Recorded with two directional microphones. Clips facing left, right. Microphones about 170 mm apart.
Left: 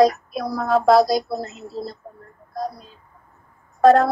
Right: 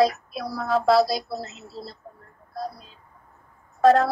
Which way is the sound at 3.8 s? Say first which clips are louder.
Left 3 dB; 55° left (ahead or behind).